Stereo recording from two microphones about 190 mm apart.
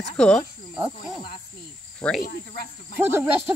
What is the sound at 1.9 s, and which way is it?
Insect, 5° left (ahead or behind).